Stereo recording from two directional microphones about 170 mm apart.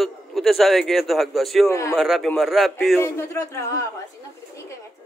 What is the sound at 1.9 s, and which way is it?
Speech, centre (ahead or behind).